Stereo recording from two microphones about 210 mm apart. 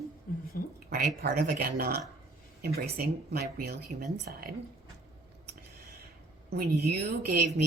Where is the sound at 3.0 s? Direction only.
45° right (ahead or behind).